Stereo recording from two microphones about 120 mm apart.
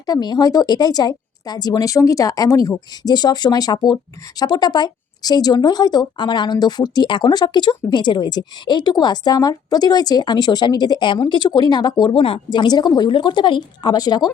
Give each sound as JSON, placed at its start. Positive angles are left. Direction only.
{"t": 0.0, "sound": "speech", "side_deg": 35}